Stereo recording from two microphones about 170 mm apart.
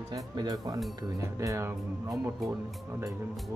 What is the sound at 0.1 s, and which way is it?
Speech, 20° right (ahead or behind).